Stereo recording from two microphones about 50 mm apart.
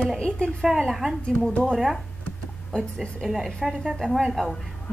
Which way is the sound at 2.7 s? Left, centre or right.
Centre.